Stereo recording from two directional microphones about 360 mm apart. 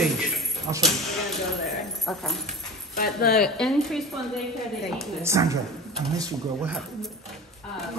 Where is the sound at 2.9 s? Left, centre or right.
Left.